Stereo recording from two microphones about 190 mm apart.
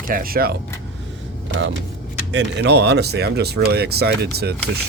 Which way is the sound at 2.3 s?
65° right (ahead or behind).